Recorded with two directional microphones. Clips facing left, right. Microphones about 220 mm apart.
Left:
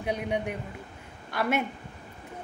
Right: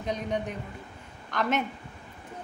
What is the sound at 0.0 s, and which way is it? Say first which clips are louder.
A woman's voice: left 1 dB; 10° left (ahead or behind).